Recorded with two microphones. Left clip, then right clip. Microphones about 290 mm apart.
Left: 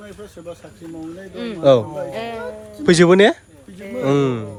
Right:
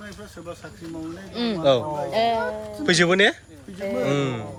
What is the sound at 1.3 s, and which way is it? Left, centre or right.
Speech, right.